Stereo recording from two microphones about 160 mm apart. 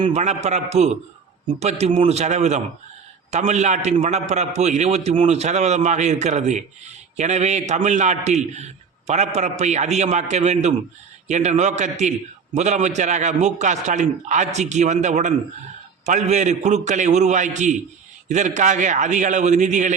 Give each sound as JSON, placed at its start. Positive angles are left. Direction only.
{"t": 0.1, "sound": "a man's voice", "side_deg": -45}